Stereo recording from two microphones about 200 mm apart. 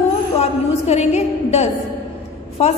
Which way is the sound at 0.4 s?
35° left (ahead or behind).